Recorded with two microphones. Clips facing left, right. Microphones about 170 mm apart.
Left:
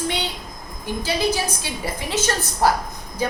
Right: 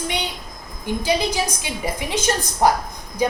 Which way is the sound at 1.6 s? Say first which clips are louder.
Right 2 dB; 15° right (ahead or behind).